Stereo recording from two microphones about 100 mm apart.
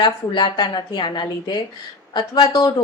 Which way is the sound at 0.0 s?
50° left (ahead or behind).